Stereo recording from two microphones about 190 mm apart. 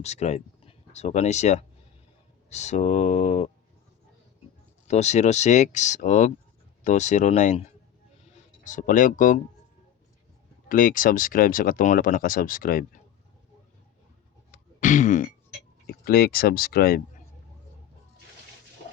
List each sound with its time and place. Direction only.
0.0 s speech: 35° left (ahead or behind)
4.9 s speech: 35° left (ahead or behind)
8.6 s speech: 45° left (ahead or behind)
10.7 s speech: 45° left (ahead or behind)
14.5 s throat clearing: 40° left (ahead or behind)
15.9 s speech: 55° left (ahead or behind)